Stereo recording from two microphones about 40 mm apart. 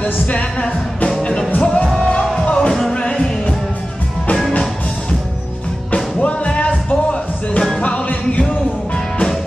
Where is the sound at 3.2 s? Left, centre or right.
Centre.